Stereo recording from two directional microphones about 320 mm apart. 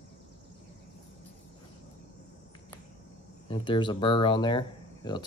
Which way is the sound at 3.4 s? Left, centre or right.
Centre.